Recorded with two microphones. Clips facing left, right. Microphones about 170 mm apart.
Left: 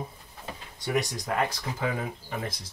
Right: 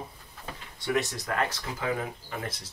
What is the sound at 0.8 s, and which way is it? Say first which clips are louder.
Speech: even; 15° left (ahead or behind).